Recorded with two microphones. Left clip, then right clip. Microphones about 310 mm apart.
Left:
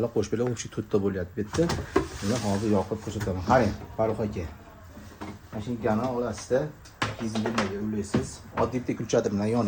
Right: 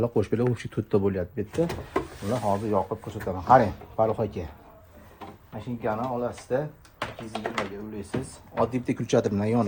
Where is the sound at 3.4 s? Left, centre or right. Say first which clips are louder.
Right 4 dB; centre.